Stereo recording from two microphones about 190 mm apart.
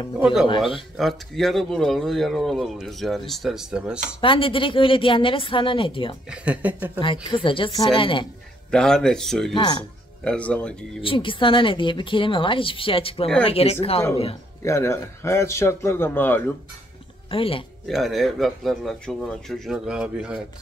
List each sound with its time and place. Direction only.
0.2 s speech: centre (ahead or behind)
0.5 s a woman's voice: 25° left (ahead or behind)
0.9 s speech: centre (ahead or behind)
4.2 s a woman's voice: 25° left (ahead or behind)
6.3 s speech: 5° right (ahead or behind)
7.0 s a woman's voice: 25° left (ahead or behind)
8.6 s speech: 5° left (ahead or behind)
9.5 s a woman's voice: 25° left (ahead or behind)
10.2 s speech: 5° left (ahead or behind)
11.0 s a woman's voice: 25° left (ahead or behind)
14.6 s a man's voice: 15° left (ahead or behind)
17.3 s a woman's voice: 30° left (ahead or behind)
17.8 s speech: centre (ahead or behind)